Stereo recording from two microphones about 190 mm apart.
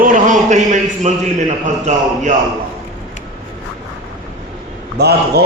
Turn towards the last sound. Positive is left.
turn(degrees=-55)  # may be behind; listen again after turning